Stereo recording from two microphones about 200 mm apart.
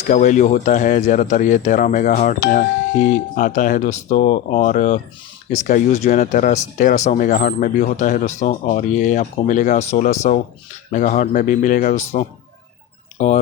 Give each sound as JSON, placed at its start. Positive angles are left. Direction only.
{"t": 0.1, "sound": "speech", "side_deg": 40}